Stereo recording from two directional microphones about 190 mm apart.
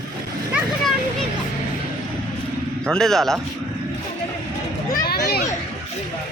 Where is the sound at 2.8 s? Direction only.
Centre (ahead or behind).